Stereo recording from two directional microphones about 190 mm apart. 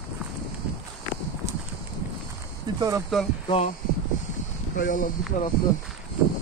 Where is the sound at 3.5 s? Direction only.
30° left (ahead or behind).